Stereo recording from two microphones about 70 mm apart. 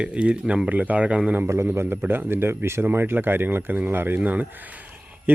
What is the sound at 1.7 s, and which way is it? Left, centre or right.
Speech, right.